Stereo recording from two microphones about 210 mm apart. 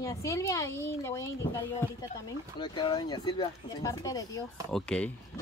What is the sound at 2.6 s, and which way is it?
Speech, 20° left (ahead or behind).